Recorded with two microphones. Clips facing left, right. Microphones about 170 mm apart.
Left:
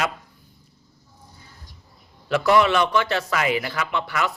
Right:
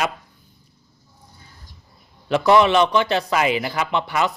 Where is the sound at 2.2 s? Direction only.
20° right (ahead or behind).